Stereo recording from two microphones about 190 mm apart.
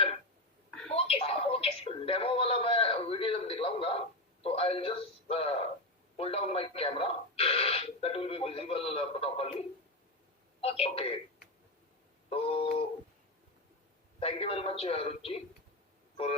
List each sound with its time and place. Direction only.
0.9 s a sound: 30° left (ahead or behind)
4.4 s a man's voice: 30° left (ahead or behind)
12.3 s a man's voice: 30° left (ahead or behind)
14.2 s a man's voice: 30° left (ahead or behind)